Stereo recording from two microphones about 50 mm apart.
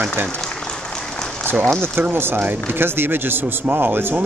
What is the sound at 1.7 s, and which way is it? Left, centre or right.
Speech, right.